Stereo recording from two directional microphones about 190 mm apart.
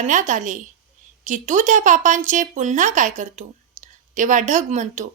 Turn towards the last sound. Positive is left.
turn(degrees=-40)  # may be behind; listen again after turning